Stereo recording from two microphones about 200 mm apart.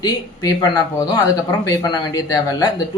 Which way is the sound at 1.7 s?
15° left (ahead or behind).